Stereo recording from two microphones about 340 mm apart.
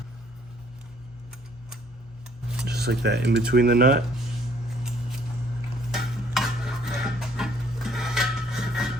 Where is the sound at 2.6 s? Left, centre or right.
Right.